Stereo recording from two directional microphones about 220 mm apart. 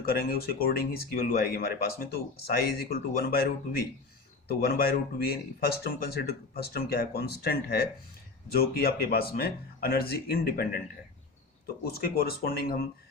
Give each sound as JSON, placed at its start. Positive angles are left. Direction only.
{"t": 0.0, "sound": "speech", "side_deg": 45}
{"t": 11.9, "sound": "speech", "side_deg": 45}